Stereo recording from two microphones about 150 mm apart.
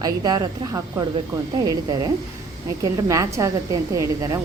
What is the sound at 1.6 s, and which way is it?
Speech, 25° right (ahead or behind).